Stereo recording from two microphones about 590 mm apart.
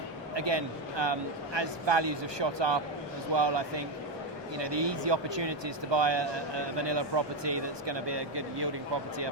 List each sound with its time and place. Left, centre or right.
0.3 s speech: right